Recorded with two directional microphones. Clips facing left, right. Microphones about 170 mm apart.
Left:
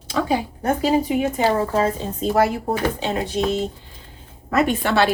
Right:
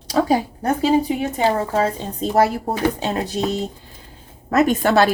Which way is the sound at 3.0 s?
40° right (ahead or behind).